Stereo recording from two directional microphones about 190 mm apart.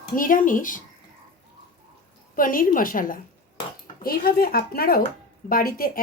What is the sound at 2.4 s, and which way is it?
Speech, 45° left (ahead or behind).